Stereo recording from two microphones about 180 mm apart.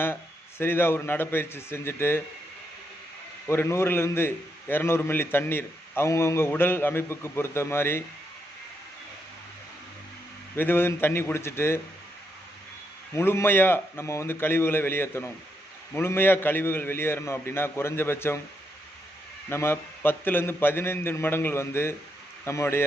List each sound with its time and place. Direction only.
0.6 s a man's voice: 10° left (ahead or behind)
3.4 s a man's voice: 15° left (ahead or behind)
10.5 s a man's voice: 10° left (ahead or behind)
13.1 s a man's voice: 15° left (ahead or behind)
19.5 s a man's voice: 15° left (ahead or behind)